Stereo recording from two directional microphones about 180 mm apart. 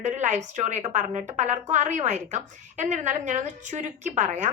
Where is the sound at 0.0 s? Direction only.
40° right (ahead or behind).